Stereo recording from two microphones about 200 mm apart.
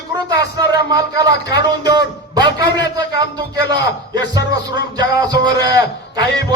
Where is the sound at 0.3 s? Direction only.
20° right (ahead or behind).